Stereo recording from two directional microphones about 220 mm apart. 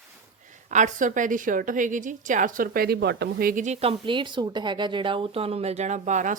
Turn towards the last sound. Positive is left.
turn(degrees=-35)  # may be behind; listen again after turning